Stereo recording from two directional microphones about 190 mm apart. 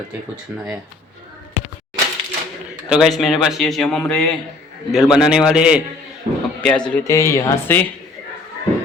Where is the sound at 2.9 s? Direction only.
Centre (ahead or behind).